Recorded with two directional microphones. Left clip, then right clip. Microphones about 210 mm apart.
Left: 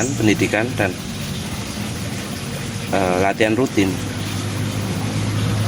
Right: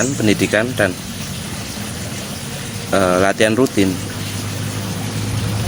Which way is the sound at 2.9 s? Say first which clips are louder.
Right 3 dB; 40° right (ahead or behind).